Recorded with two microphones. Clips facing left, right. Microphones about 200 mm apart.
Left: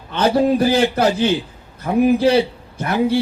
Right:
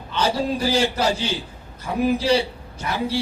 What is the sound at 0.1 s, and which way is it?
A man's voice, 55° left (ahead or behind).